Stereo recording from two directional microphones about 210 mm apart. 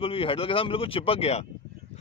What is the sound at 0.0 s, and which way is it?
Speech, 25° left (ahead or behind).